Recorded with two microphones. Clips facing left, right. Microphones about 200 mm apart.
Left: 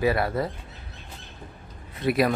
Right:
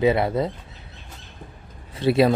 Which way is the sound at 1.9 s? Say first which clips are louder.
Right 5 dB; 30° right (ahead or behind).